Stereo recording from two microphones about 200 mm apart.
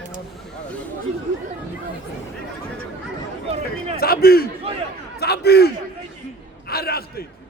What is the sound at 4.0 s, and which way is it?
Speech, 50° left (ahead or behind).